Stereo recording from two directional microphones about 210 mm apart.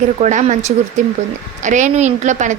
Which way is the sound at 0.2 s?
35° right (ahead or behind).